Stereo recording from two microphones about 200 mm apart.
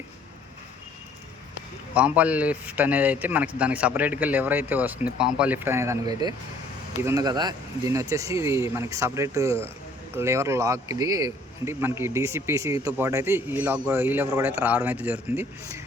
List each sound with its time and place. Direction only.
2.0 s a man's voice: 5° right (ahead or behind)